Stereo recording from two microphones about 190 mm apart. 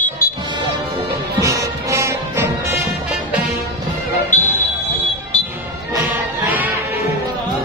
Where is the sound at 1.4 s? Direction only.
15° right (ahead or behind).